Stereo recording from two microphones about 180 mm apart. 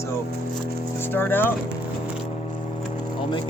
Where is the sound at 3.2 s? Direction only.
25° left (ahead or behind).